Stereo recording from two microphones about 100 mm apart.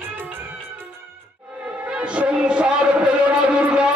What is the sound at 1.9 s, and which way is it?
Music, 10° right (ahead or behind).